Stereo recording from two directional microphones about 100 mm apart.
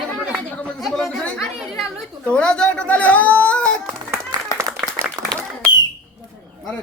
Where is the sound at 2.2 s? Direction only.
10° left (ahead or behind).